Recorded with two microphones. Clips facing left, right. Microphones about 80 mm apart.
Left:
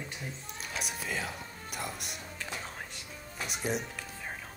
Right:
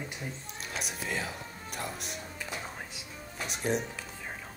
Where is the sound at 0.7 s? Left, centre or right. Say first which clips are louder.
Right 1 dB; centre.